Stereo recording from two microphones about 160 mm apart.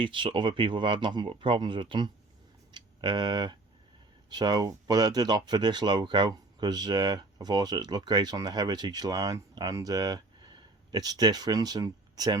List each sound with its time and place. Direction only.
0.0 s speech: 30° right (ahead or behind)